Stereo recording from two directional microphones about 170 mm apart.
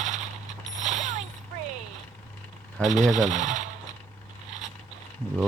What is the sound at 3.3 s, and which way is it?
Speech, 45° right (ahead or behind).